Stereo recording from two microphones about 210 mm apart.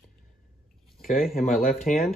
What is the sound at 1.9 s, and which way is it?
Speech, 35° left (ahead or behind).